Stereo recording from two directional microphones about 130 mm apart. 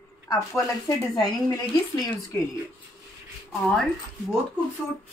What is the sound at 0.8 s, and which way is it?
A woman's voice, 25° left (ahead or behind).